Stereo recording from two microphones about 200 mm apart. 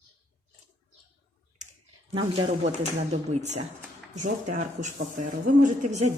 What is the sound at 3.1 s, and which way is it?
Speech, 35° right (ahead or behind).